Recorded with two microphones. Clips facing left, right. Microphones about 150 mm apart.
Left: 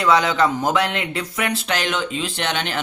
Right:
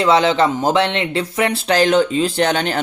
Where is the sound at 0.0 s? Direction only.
25° right (ahead or behind).